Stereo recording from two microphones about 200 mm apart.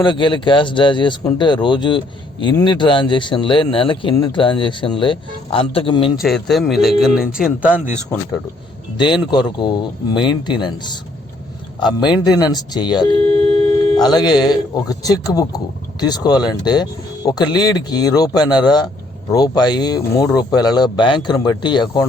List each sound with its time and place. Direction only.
0.0 s speech: 25° left (ahead or behind)
6.1 s speech: centre (ahead or behind)
9.0 s speech: 25° left (ahead or behind)